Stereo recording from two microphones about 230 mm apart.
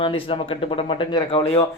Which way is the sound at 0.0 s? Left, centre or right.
Left.